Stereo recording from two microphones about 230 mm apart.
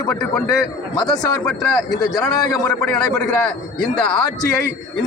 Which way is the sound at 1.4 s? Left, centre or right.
Centre.